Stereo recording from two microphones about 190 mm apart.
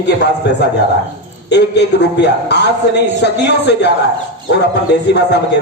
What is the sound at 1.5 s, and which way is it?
A man's voice, 65° left (ahead or behind).